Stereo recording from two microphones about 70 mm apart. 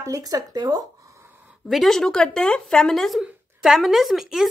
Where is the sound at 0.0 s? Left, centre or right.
Right.